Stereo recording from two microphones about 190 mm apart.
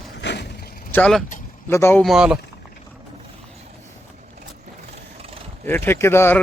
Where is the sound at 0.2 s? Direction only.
60° left (ahead or behind).